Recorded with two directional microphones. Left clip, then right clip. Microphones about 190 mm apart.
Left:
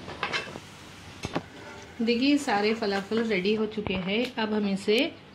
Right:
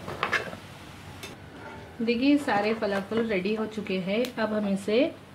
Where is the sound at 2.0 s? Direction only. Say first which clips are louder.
Even; 40° left (ahead or behind).